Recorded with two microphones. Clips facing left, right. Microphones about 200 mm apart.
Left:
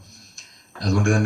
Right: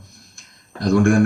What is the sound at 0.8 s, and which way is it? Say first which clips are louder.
Speech: right 6 dB; 55° right (ahead or behind).